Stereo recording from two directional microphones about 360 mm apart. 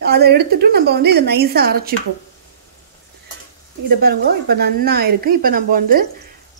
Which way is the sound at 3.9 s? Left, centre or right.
Right.